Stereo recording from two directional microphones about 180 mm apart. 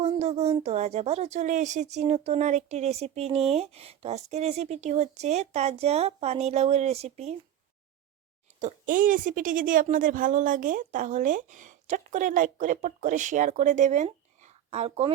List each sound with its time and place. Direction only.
0.0 s speech: 40° right (ahead or behind)
8.5 s a woman's voice: 45° right (ahead or behind)